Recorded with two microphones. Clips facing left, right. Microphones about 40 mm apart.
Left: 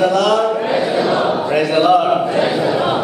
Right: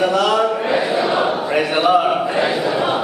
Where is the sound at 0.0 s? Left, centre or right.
Centre.